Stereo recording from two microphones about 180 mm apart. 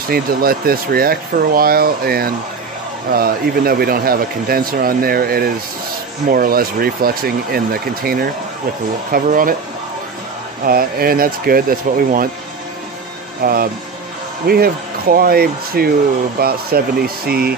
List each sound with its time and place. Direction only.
0.1 s speech: 55° right (ahead or behind)
10.6 s speech: 55° right (ahead or behind)
13.4 s speech: 55° right (ahead or behind)